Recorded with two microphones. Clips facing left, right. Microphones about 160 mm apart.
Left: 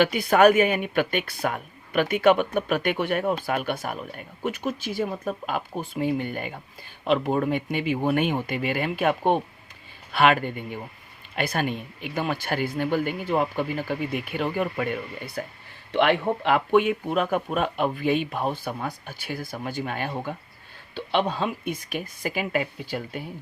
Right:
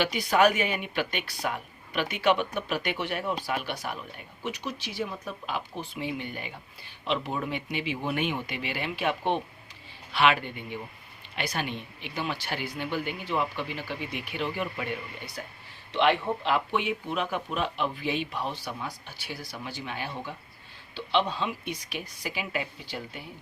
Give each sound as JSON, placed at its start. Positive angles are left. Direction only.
{"t": 0.0, "sound": "speech", "side_deg": 55}